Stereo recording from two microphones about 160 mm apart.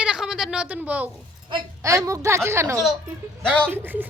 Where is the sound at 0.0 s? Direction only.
5° right (ahead or behind).